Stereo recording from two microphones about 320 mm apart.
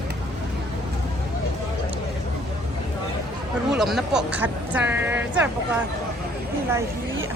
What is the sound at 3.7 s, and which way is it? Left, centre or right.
A woman's voice, centre.